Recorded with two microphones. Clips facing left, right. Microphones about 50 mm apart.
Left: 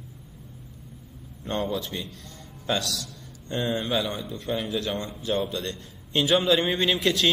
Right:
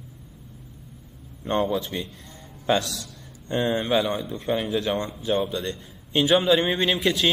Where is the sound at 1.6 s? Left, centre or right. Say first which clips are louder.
Right 3 dB; centre.